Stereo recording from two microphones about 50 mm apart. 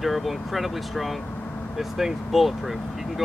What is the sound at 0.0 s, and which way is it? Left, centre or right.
Speech, centre.